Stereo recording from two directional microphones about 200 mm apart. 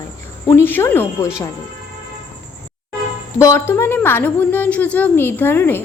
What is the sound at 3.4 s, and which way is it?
A woman's voice, 15° left (ahead or behind).